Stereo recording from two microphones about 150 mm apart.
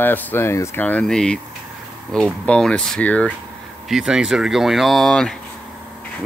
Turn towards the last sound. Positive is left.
turn(degrees=5)  # may be behind; listen again after turning